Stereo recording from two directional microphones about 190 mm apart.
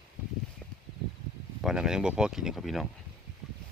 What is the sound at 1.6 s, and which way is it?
Speech, centre (ahead or behind).